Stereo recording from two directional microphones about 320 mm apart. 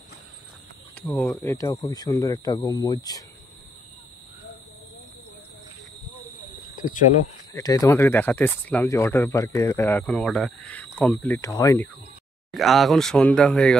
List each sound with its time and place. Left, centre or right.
0.9 s speech: centre
6.7 s cricket: left
7.5 s speech: centre